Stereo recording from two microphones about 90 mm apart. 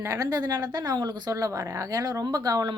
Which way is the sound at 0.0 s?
35° right (ahead or behind).